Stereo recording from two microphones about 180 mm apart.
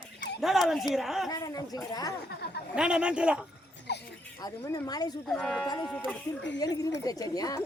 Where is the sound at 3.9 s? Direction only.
65° left (ahead or behind).